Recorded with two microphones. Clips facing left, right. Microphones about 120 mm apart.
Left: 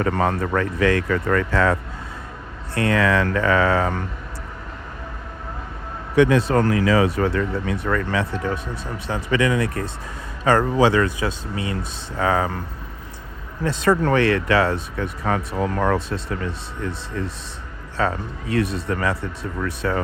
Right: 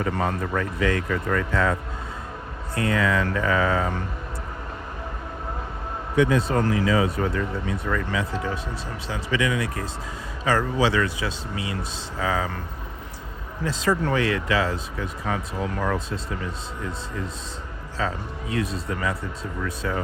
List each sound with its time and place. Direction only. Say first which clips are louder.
0.0 s speech: left 4 dB; 60° left (ahead or behind); by 1.7 s 85° left
2.7 s speech: left 4 dB; 80° left
6.1 s speech: left 4 dB; 75° left (ahead or behind)
9.0 s speech: left 5 dB; 50° left (ahead or behind)
13.7 s speech: left 5 dB; 60° left (ahead or behind)
17.9 s speech: left 5 dB; 65° left (ahead or behind)